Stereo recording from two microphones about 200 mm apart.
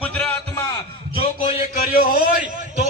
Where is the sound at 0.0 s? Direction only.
5° left (ahead or behind).